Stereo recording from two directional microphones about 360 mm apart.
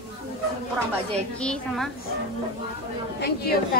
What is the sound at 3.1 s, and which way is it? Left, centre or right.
Speech, left.